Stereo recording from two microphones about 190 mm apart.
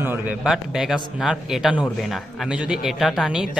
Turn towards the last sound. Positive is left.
turn(degrees=0)  # may be behind; listen again after turning